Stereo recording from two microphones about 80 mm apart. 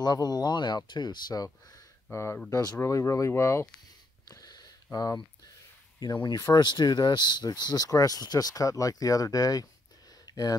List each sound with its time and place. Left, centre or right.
0.0 s speech: left
2.1 s speech: left
4.3 s a sound: left
4.9 s speech: left
6.5 s speech: left
10.2 s a sound: left